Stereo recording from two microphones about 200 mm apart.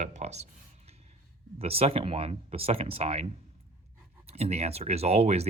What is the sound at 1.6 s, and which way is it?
Speech, 30° right (ahead or behind).